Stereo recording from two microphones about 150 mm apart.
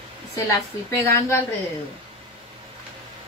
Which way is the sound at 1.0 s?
20° left (ahead or behind).